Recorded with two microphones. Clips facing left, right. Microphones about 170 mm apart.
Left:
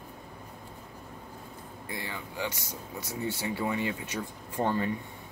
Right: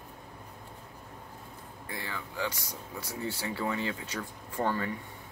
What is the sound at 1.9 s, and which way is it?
Speech, 20° left (ahead or behind).